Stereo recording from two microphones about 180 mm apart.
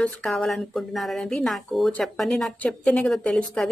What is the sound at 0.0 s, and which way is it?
Speech, centre (ahead or behind).